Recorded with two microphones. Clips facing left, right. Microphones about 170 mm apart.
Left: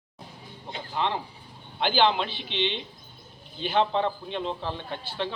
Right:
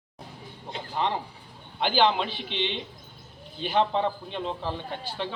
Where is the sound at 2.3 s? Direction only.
50° right (ahead or behind).